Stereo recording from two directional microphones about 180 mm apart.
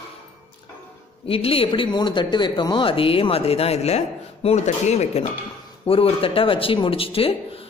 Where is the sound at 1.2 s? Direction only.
30° left (ahead or behind).